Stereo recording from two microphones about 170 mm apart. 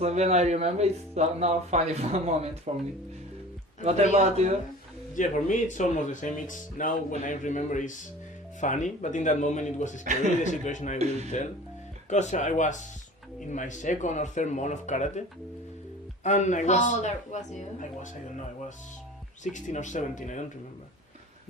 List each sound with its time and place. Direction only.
0.0 s speech: 40° right (ahead or behind)
4.1 s speech: 40° right (ahead or behind)
5.1 s speech: 50° left (ahead or behind)
10.0 s a man's voice: 45° right (ahead or behind)
10.4 s speech: 45° left (ahead or behind)
10.9 s speech: 40° right (ahead or behind)
12.0 s speech: 45° left (ahead or behind)
16.2 s speech: 45° left (ahead or behind)
19.5 s speech: 45° left (ahead or behind)